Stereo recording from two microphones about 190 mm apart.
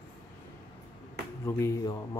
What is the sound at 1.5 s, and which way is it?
Speech, 15° left (ahead or behind).